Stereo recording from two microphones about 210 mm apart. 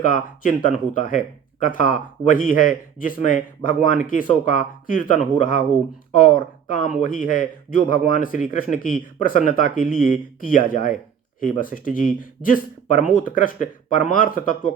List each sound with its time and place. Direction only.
0.0 s speech: 40° left (ahead or behind)
6.7 s speech: 40° left (ahead or behind)